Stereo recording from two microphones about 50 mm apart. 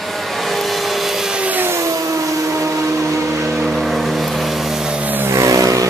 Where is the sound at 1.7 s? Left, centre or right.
Right.